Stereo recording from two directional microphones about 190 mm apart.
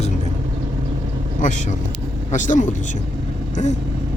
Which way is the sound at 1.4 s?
40° left (ahead or behind).